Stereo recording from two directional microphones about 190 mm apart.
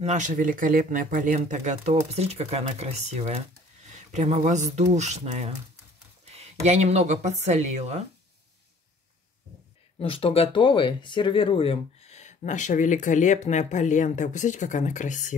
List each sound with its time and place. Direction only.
0.0 s speech: 40° right (ahead or behind)
9.9 s speech: 30° left (ahead or behind)